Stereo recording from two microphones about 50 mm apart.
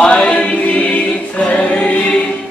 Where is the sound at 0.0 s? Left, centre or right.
Left.